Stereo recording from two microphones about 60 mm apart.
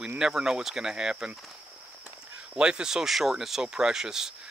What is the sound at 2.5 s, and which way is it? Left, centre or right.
Speech, centre.